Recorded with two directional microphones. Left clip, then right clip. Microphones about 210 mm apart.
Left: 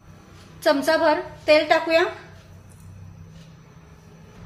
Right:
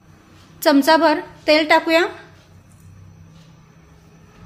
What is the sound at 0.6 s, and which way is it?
A woman's voice, 50° right (ahead or behind).